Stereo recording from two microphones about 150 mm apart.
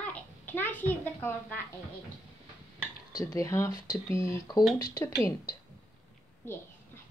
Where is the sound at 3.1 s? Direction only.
25° left (ahead or behind).